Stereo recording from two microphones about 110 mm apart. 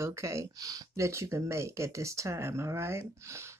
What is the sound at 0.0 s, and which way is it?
Speech, 25° right (ahead or behind).